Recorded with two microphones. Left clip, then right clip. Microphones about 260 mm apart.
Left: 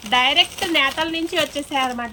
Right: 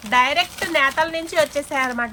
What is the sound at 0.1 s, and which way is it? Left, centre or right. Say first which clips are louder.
Speech: left 1 dB; centre.